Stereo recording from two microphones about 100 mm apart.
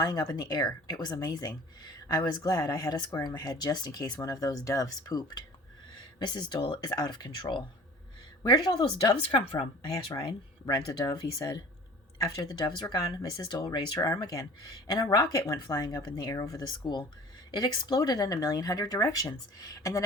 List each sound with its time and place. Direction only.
0.0 s speech: 40° left (ahead or behind); by 9.6 s 55° left (ahead or behind)
9.9 s speech: 45° left (ahead or behind)